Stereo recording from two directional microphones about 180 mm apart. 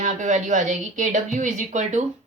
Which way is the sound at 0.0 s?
40° right (ahead or behind).